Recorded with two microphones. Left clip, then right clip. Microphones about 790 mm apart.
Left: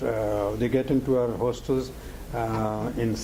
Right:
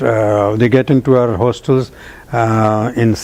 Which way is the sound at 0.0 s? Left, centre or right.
Right.